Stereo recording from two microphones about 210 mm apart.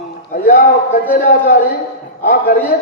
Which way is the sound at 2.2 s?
45° left (ahead or behind).